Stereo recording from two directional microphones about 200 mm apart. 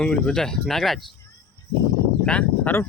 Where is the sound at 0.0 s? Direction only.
5° left (ahead or behind).